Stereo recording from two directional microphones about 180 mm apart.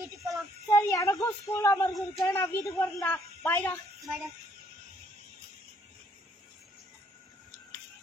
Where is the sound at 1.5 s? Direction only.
15° left (ahead or behind).